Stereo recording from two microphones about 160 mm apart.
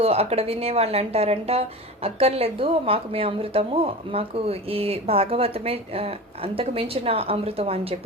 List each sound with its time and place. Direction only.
0.0 s a woman's voice: 40° right (ahead or behind)